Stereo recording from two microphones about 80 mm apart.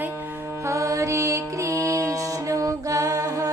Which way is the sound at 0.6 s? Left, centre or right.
Right.